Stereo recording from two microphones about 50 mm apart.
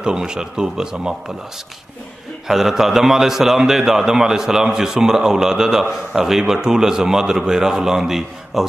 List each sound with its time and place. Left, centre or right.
0.0 s a man's voice: centre
2.4 s a man's voice: centre